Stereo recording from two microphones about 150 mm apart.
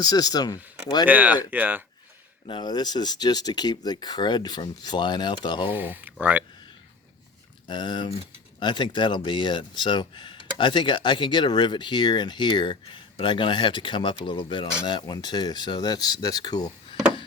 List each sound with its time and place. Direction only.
0.0 s speech: 25° left (ahead or behind)
1.0 s speech: 10° right (ahead or behind)
2.5 s speech: 30° left (ahead or behind)
5.7 s speech: 10° right (ahead or behind)
7.7 s speech: 30° left (ahead or behind)